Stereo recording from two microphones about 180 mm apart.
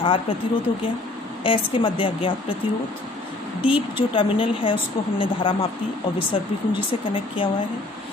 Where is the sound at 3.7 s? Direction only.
30° left (ahead or behind).